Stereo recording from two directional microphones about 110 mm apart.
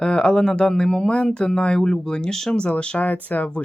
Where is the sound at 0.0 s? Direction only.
10° left (ahead or behind).